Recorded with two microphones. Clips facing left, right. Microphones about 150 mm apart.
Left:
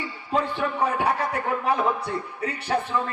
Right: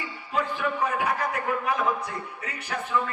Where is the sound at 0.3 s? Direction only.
30° left (ahead or behind).